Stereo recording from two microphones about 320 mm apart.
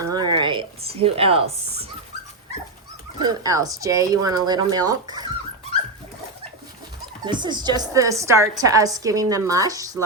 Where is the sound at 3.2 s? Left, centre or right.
Centre.